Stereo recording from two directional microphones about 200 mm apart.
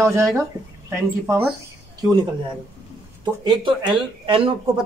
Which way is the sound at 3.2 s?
20° right (ahead or behind).